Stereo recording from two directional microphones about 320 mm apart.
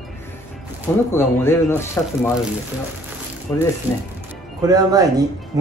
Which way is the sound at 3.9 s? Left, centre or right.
Centre.